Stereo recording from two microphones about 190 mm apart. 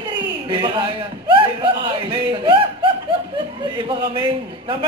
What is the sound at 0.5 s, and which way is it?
Speech, 25° right (ahead or behind).